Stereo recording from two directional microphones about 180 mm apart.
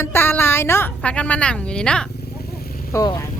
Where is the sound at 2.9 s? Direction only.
20° left (ahead or behind).